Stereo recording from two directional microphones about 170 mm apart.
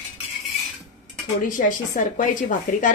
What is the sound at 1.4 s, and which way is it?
A woman's voice, 50° left (ahead or behind).